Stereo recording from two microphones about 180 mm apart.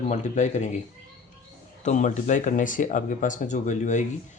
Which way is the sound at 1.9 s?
40° left (ahead or behind).